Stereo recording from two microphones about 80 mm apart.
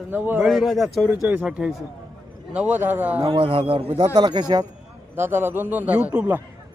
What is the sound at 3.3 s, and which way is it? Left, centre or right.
Speech, right.